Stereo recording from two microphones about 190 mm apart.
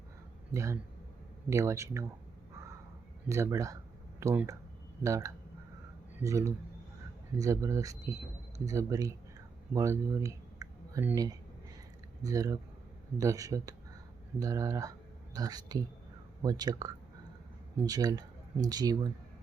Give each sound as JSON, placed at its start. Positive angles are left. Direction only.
{"t": 0.5, "sound": "speech", "side_deg": -15}
{"t": 3.2, "sound": "speech", "side_deg": -15}